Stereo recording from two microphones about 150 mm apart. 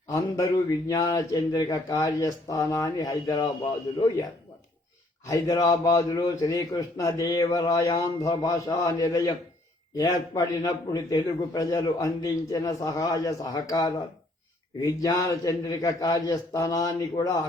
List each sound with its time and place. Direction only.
0.1 s a man's voice: 20° left (ahead or behind)
5.2 s a man's voice: 25° left (ahead or behind)